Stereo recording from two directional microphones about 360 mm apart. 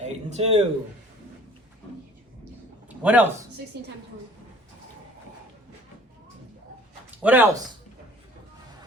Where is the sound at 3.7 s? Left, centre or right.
Right.